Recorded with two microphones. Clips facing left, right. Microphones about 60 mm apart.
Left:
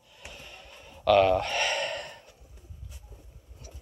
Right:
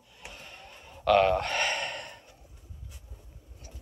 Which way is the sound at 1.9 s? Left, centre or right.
Centre.